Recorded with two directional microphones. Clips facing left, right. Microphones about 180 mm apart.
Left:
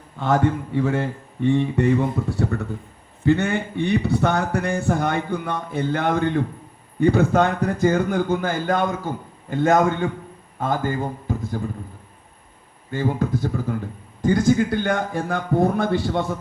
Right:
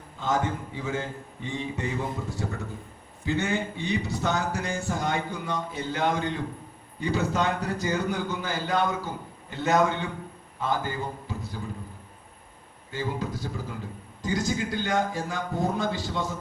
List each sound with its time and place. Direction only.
0.2 s a man's voice: 65° left (ahead or behind); by 11.5 s 50° left (ahead or behind)
12.9 s a man's voice: 55° left (ahead or behind)